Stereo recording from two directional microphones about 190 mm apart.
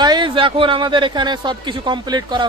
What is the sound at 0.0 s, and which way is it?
Speech, 25° right (ahead or behind).